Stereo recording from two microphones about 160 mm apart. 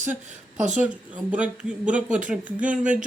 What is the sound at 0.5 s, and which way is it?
Speech, 50° right (ahead or behind).